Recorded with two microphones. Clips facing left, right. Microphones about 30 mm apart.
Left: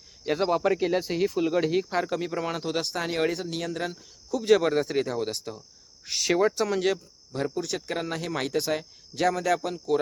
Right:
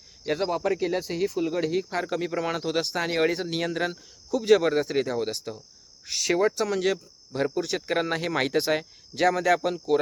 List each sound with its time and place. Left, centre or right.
0.4 s speech: centre
2.0 s speech: centre
3.3 s speech: right
4.3 s speech: centre
7.3 s speech: centre
9.1 s speech: centre